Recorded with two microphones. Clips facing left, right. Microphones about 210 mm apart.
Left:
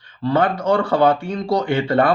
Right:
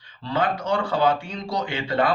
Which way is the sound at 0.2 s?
55° left (ahead or behind).